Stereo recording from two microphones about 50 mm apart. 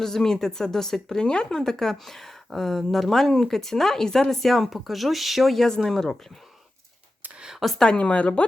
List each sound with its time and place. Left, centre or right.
0.0 s speech: centre
7.8 s speech: left